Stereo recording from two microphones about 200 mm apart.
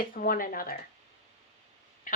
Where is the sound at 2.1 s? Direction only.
45° left (ahead or behind).